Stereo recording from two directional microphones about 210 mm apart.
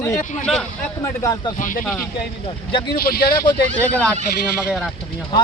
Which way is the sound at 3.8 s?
5° left (ahead or behind).